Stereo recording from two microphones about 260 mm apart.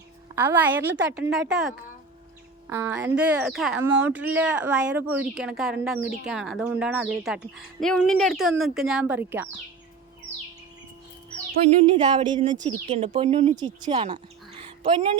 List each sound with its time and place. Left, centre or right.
0.3 s a woman's voice: centre
11.8 s music: right
12.8 s speech: right